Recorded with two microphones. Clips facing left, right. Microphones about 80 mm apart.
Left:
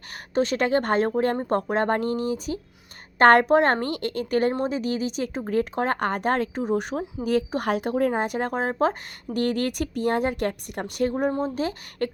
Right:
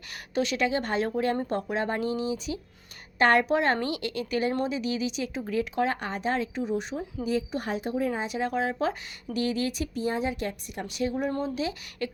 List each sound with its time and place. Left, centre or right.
0.3 s speech: left